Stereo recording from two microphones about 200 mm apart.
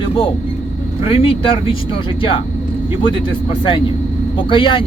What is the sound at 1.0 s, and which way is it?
Speech, 25° left (ahead or behind).